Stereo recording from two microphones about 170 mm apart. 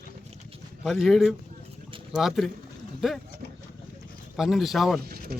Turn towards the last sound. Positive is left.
turn(degrees=-65)  # may be behind; listen again after turning